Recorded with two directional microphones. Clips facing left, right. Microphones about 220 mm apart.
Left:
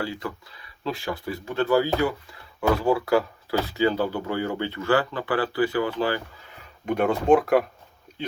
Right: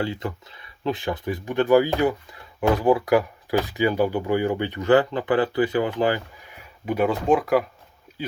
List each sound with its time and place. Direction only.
0.0 s speech: 25° right (ahead or behind)
6.8 s speech: 5° right (ahead or behind)